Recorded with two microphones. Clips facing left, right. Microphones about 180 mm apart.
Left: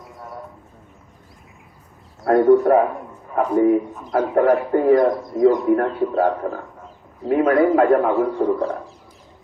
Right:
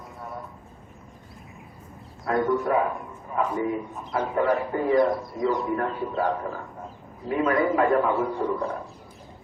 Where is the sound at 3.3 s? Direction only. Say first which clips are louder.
Left 9 dB; 65° left (ahead or behind).